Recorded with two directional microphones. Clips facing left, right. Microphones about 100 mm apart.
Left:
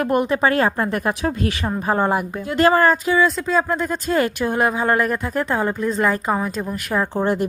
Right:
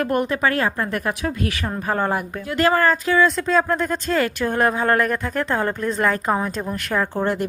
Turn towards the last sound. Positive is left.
turn(degrees=20)  # may be behind; listen again after turning